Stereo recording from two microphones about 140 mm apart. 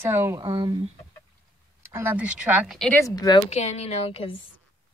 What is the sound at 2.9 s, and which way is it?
Speech, 25° left (ahead or behind).